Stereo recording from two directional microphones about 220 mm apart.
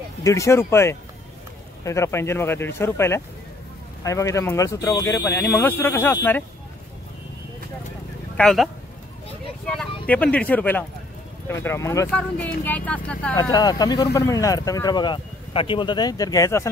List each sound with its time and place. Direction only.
0.2 s speech: 15° left (ahead or behind)
8.4 s speech: centre (ahead or behind)
9.7 s speech: 5° left (ahead or behind)
13.5 s speech: 20° left (ahead or behind)